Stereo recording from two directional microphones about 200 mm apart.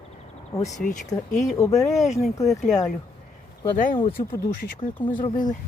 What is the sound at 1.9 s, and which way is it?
Speech, 35° left (ahead or behind).